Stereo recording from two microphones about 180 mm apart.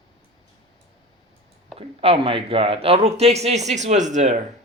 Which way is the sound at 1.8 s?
30° right (ahead or behind).